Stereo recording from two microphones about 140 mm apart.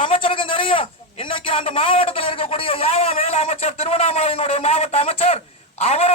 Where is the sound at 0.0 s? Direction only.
40° left (ahead or behind).